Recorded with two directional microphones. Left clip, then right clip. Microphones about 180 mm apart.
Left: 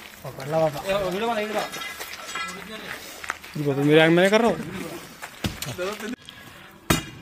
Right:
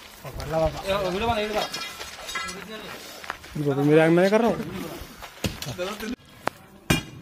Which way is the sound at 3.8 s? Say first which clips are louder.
Left 1 dB; centre (ahead or behind).